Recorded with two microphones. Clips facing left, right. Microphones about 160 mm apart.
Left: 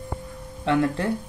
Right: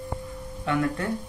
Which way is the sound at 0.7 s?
30° left (ahead or behind).